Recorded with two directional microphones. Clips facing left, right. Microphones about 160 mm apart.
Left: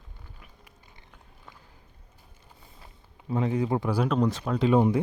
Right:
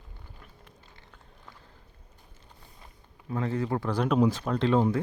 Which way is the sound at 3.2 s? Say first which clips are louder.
Left 3 dB; 20° left (ahead or behind).